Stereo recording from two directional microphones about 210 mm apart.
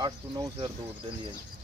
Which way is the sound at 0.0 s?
20° right (ahead or behind).